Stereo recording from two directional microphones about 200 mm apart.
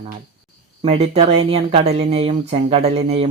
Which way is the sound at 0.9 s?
30° right (ahead or behind).